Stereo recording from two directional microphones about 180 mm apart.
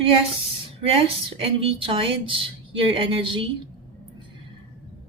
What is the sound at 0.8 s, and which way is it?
A woman's voice, 30° right (ahead or behind).